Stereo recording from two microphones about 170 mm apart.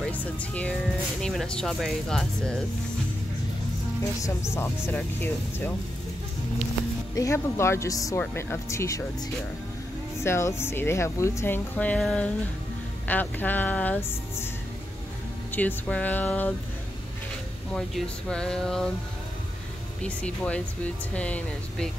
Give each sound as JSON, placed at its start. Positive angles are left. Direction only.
{"t": 0.0, "sound": "speech", "side_deg": 10}
{"t": 4.2, "sound": "speech", "side_deg": 15}
{"t": 7.2, "sound": "speech", "side_deg": 15}
{"t": 10.2, "sound": "speech", "side_deg": 15}
{"t": 15.5, "sound": "speech", "side_deg": 10}
{"t": 17.7, "sound": "speech", "side_deg": 5}
{"t": 20.0, "sound": "speech", "side_deg": 5}